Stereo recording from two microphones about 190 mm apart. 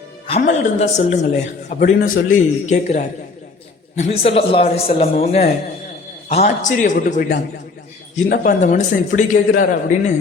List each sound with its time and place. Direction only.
0.3 s speech: 35° left (ahead or behind)